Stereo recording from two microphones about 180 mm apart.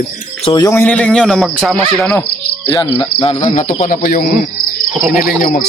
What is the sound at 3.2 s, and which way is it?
Cricket, 35° left (ahead or behind).